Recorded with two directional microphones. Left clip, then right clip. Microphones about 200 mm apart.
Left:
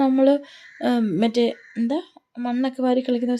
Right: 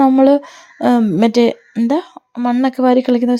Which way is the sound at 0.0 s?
30° right (ahead or behind).